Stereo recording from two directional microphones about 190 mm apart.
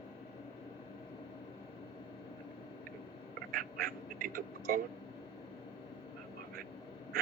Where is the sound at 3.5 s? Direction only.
50° right (ahead or behind).